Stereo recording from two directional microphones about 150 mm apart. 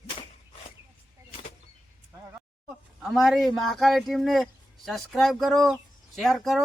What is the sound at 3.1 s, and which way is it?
Speech, centre (ahead or behind).